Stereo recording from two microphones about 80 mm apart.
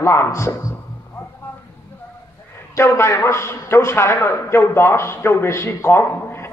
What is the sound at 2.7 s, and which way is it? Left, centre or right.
A man's voice, left.